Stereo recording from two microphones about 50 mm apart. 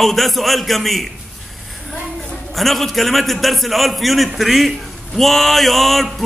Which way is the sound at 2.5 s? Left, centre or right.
Centre.